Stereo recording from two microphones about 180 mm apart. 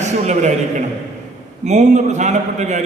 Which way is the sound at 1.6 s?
40° right (ahead or behind).